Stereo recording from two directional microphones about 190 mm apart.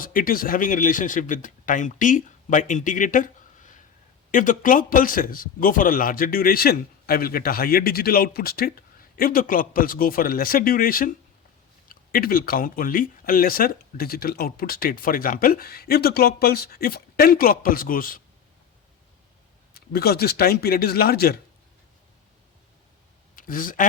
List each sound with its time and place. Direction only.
0.0 s a man's voice: 45° left (ahead or behind)
4.3 s a man's voice: 45° left (ahead or behind)
19.7 s speech: 55° left (ahead or behind)
23.3 s a man's voice: 45° left (ahead or behind)